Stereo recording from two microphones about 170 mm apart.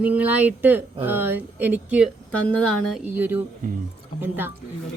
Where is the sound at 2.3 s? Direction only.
5° left (ahead or behind).